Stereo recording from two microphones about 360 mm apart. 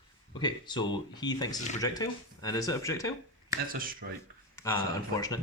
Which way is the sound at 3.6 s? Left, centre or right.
Right.